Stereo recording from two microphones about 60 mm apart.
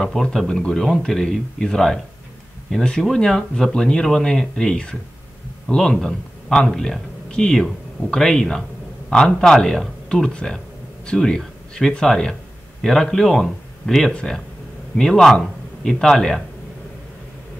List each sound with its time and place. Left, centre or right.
0.0 s speech: centre